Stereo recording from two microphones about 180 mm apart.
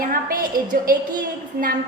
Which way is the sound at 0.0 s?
50° right (ahead or behind).